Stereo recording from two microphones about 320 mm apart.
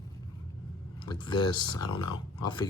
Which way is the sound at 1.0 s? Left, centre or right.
Centre.